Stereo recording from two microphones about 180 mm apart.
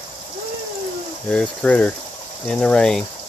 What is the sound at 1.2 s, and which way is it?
Speech, 5° left (ahead or behind).